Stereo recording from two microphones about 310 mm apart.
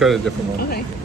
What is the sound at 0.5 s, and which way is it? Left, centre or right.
Speech, left.